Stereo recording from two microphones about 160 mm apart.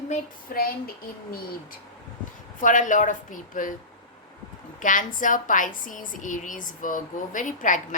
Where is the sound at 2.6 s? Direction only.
55° left (ahead or behind).